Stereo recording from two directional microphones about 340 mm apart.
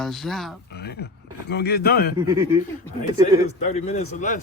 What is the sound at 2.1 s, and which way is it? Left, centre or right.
Speech, centre.